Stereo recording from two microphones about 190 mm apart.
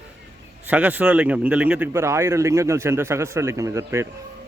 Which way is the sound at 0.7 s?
10° right (ahead or behind).